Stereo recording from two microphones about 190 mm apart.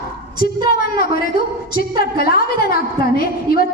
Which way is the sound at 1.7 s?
50° left (ahead or behind).